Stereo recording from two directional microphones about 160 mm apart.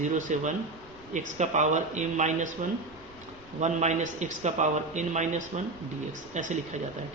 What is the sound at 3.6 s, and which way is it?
A man's voice, 45° right (ahead or behind).